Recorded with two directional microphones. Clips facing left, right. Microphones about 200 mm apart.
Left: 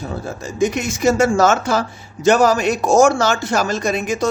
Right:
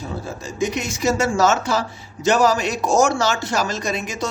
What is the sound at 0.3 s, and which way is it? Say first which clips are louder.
A man's voice: left 5 dB; 55° left (ahead or behind).